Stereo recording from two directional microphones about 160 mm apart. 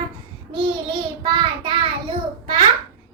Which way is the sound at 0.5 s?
30° right (ahead or behind).